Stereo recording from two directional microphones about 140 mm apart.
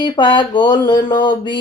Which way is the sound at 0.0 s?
35° left (ahead or behind).